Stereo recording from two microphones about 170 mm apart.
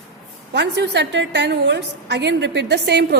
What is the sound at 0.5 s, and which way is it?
A woman's voice, 90° right.